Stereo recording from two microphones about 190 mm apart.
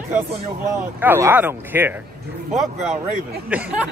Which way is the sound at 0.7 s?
10° right (ahead or behind).